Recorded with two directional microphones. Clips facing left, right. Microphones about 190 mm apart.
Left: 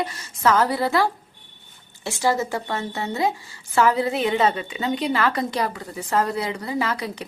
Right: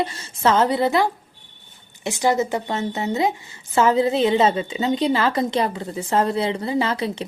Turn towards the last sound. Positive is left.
turn(degrees=-25)  # may be behind; listen again after turning